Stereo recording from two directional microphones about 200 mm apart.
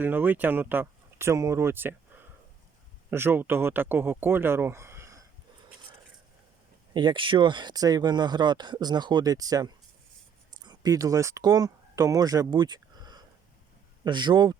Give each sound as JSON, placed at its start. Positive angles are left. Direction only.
{"t": 0.0, "sound": "speech", "side_deg": -10}
{"t": 3.1, "sound": "speech", "side_deg": -10}
{"t": 6.9, "sound": "speech", "side_deg": -20}